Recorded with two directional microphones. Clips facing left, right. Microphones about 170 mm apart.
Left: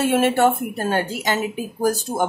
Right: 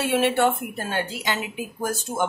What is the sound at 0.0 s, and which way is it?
Speech, 45° left (ahead or behind).